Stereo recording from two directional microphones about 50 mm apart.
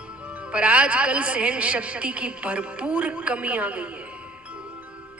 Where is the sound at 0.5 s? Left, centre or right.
Right.